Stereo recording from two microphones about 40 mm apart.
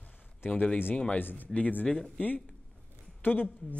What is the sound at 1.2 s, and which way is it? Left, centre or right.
Speech, left.